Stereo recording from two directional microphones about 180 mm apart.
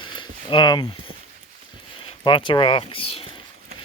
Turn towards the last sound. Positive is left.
turn(degrees=30)  # may be behind; listen again after turning